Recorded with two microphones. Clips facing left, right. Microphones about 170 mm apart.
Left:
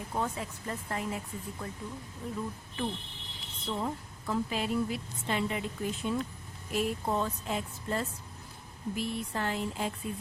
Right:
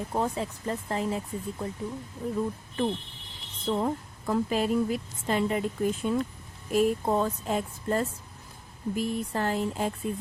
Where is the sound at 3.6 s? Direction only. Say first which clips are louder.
Right 7 dB; 50° right (ahead or behind).